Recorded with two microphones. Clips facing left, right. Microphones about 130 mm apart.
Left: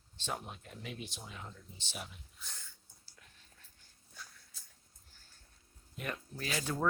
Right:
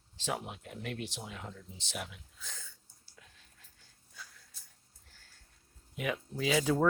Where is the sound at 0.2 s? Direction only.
90° right.